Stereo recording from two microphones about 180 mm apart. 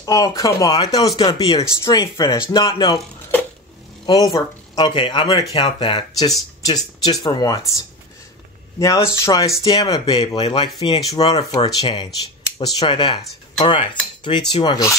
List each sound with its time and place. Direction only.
0.0 s speech: 20° left (ahead or behind)
4.0 s speech: 25° left (ahead or behind)
8.7 s speech: 20° left (ahead or behind)